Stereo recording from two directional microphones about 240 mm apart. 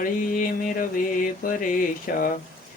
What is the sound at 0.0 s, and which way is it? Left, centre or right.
Speech, left.